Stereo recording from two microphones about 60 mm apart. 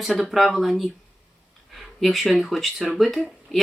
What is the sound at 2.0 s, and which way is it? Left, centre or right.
Speech, centre.